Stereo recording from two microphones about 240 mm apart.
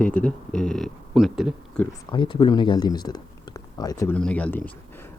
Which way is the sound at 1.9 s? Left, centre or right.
Centre.